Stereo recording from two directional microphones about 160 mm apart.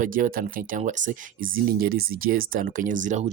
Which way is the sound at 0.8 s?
50° right (ahead or behind).